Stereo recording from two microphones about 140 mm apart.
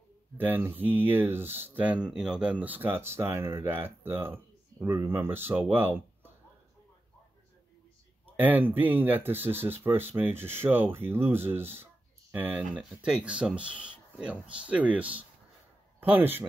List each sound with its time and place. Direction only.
0.4 s speech: 15° right (ahead or behind)
8.4 s speech: 15° right (ahead or behind)